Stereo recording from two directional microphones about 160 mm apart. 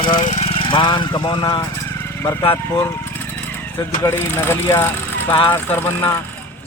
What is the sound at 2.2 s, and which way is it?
Speech, 15° left (ahead or behind).